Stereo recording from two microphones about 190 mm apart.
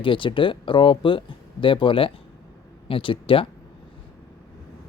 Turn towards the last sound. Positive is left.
turn(degrees=25)  # may be behind; listen again after turning